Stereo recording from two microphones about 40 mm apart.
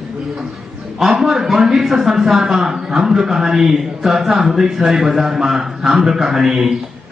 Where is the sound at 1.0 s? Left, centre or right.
Centre.